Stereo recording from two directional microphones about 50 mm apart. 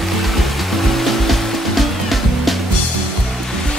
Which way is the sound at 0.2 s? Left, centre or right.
Centre.